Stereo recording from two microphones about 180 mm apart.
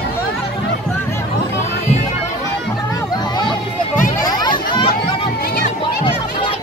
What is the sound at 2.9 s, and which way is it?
Music, 25° left (ahead or behind).